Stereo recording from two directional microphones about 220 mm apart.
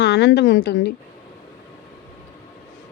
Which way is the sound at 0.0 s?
50° left (ahead or behind).